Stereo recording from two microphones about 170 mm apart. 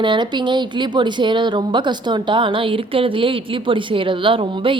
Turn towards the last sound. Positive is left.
turn(degrees=-30)  # may be behind; listen again after turning